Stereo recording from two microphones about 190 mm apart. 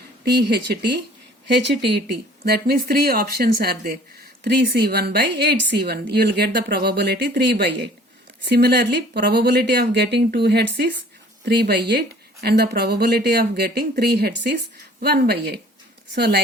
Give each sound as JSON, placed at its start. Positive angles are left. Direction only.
{"t": 0.3, "sound": "a woman's voice", "side_deg": -60}
{"t": 2.4, "sound": "a woman's voice", "side_deg": -55}